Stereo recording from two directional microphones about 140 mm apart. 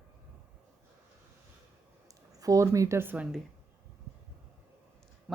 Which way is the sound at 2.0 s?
25° right (ahead or behind).